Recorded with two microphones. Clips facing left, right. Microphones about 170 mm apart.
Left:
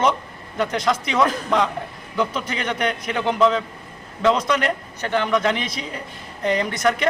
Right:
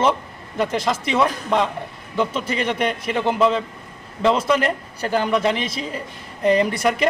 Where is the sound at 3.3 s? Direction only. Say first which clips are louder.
Even; 5° right (ahead or behind).